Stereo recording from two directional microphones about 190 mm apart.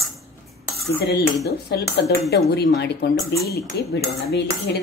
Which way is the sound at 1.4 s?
55° left (ahead or behind).